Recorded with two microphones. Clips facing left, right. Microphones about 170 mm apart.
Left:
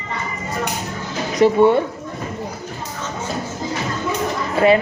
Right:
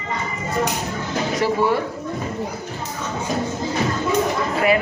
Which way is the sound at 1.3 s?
20° left (ahead or behind).